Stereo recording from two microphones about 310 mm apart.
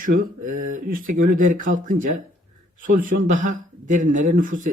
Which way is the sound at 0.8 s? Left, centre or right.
Right.